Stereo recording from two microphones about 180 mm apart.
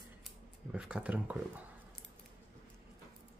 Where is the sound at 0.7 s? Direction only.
5° right (ahead or behind).